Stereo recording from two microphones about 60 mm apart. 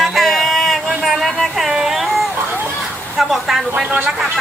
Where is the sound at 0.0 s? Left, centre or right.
Centre.